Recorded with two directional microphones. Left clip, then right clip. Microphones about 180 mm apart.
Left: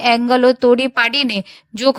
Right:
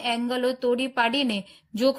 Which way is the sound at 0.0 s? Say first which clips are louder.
Left 13 dB; 35° left (ahead or behind).